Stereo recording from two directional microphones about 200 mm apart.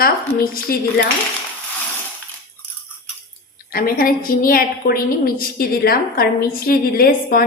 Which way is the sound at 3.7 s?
45° left (ahead or behind).